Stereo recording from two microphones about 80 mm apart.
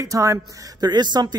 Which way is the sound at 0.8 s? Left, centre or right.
Right.